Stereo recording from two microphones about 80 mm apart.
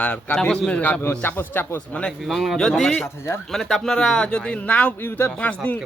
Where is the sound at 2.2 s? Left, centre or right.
Centre; by 5.8 s left.